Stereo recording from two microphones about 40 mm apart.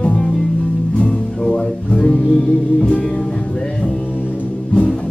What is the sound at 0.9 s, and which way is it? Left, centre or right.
Music, left.